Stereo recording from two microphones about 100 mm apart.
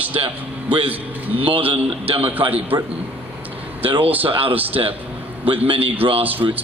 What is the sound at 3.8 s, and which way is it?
A man's voice, 65° right (ahead or behind).